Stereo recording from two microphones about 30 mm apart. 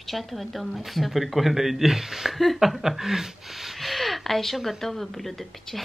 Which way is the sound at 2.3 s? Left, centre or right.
Centre.